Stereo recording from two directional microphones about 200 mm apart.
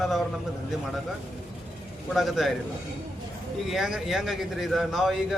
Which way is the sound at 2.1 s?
Centre (ahead or behind).